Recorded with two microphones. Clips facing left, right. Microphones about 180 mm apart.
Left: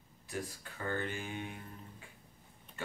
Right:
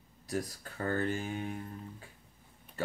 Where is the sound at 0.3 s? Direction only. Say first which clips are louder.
Right 5 dB; 40° right (ahead or behind).